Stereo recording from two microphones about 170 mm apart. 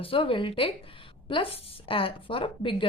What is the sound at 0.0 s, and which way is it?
A woman's voice, 30° left (ahead or behind).